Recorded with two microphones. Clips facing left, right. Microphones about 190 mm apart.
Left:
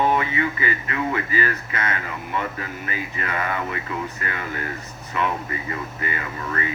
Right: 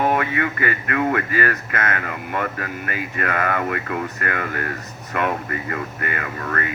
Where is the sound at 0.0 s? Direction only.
55° right (ahead or behind).